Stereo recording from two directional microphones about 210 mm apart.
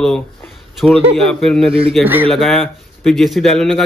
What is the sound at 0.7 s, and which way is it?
A man's voice, centre (ahead or behind).